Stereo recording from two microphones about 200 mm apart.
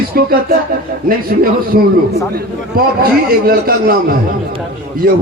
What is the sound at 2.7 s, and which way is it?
A man's voice, 50° right (ahead or behind).